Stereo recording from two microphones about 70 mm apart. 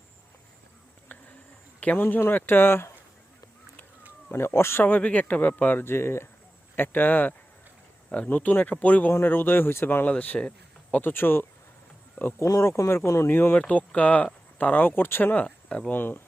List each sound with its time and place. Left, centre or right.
1.8 s speech: left
4.3 s speech: left
4.8 s speech: left
12.5 s speech: left
13.3 s speech: left